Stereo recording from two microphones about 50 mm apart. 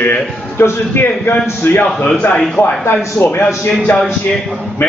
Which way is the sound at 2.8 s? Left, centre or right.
Left.